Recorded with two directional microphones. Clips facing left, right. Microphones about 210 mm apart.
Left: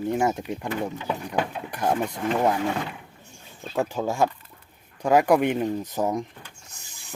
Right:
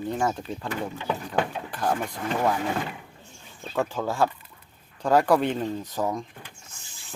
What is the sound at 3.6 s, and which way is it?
Speech, 10° left (ahead or behind).